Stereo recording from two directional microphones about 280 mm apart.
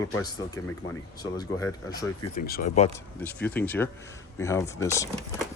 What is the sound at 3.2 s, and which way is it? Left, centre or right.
Speech, centre.